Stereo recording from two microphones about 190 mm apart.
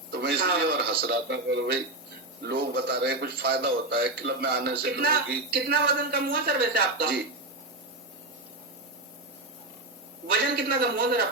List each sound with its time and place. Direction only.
0.1 s a man's voice: 60° right (ahead or behind)
10.3 s a man's voice: 55° right (ahead or behind)